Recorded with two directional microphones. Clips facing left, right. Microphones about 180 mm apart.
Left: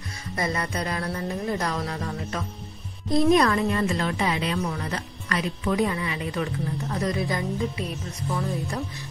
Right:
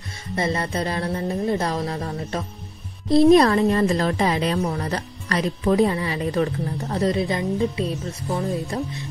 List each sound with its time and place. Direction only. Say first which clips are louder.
0.4 s speech: right 4 dB; 30° right (ahead or behind)